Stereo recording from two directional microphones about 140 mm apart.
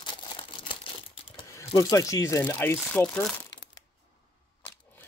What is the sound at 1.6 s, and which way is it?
Speech, 25° left (ahead or behind).